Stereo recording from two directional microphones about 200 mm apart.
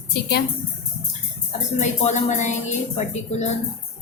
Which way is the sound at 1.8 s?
35° left (ahead or behind).